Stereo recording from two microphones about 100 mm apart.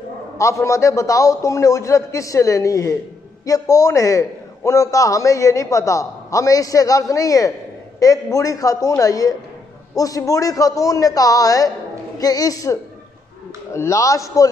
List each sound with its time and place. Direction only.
0.4 s a man's voice: 30° left (ahead or behind)
13.7 s a man's voice: 30° left (ahead or behind)